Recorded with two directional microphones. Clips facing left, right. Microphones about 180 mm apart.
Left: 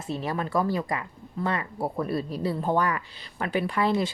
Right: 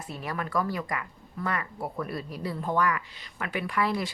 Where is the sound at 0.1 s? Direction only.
25° left (ahead or behind).